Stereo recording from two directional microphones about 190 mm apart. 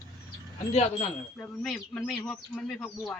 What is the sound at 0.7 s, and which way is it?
Speech, 35° left (ahead or behind).